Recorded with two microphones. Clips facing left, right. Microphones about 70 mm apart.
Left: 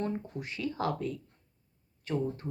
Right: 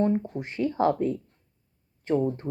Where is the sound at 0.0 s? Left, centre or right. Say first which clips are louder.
Right 9 dB; right.